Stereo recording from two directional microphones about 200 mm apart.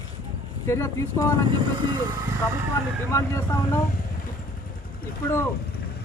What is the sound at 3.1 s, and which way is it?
Speech, 15° left (ahead or behind).